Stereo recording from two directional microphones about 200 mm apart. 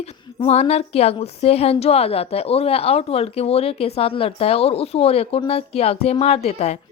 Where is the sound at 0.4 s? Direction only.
30° left (ahead or behind).